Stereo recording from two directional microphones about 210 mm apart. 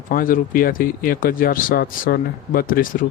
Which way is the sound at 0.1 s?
40° left (ahead or behind).